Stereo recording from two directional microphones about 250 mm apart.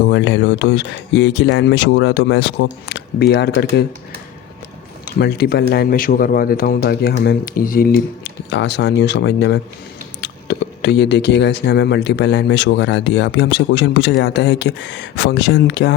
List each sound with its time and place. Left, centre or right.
0.1 s speech: left
5.0 s speech: left